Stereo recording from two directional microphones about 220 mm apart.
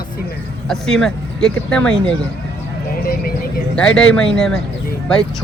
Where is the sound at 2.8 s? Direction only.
40° left (ahead or behind).